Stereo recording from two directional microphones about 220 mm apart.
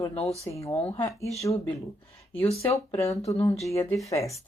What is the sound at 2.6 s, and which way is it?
Speech, 15° left (ahead or behind).